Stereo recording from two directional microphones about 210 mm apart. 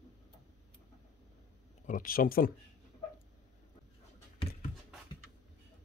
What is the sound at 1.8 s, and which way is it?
Speech, 40° left (ahead or behind).